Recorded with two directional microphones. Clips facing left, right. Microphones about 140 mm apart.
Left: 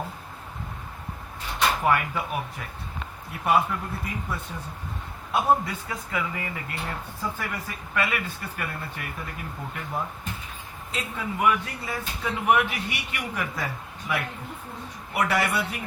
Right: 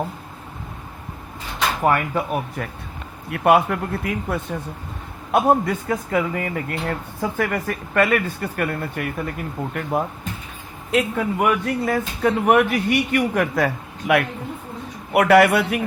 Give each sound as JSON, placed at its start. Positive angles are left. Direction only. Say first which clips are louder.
{"t": 1.8, "sound": "speech", "louder": "right 5 dB", "side_deg": -45}
{"t": 3.2, "sound": "speech", "louder": "right 7 dB", "side_deg": -70}
{"t": 5.3, "sound": "speech", "louder": "right 6 dB", "side_deg": -55}
{"t": 10.9, "sound": "speech", "louder": "right 10 dB", "side_deg": -50}
{"t": 15.1, "sound": "speech", "louder": "right 11 dB", "side_deg": -65}